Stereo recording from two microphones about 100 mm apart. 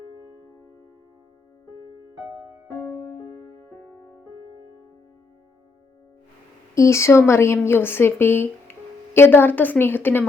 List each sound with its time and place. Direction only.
2.7 s music: 15° left (ahead or behind)
6.7 s a woman's voice: 30° left (ahead or behind)